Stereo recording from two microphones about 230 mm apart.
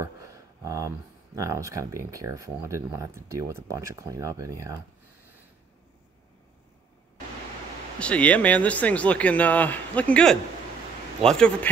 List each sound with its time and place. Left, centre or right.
0.0 s speech: centre
8.0 s speech: centre